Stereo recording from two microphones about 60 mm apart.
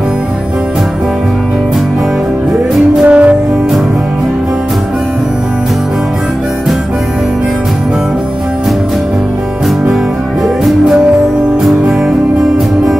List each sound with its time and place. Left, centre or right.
3.1 s music: right